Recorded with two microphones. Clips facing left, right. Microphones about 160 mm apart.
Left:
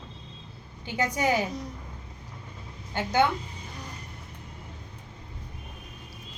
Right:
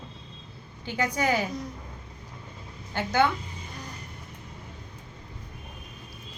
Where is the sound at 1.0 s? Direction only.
20° left (ahead or behind).